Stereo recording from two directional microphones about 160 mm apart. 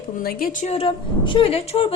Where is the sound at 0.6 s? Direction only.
35° left (ahead or behind).